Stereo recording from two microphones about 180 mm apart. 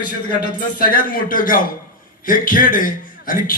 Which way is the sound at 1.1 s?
50° left (ahead or behind).